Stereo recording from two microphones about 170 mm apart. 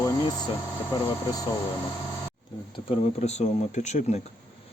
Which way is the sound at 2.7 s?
35° left (ahead or behind).